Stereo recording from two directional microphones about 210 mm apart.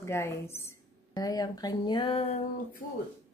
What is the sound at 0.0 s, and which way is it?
Speech, 10° left (ahead or behind).